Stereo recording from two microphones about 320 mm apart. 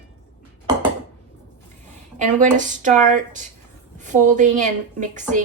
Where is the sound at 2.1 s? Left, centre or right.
Right.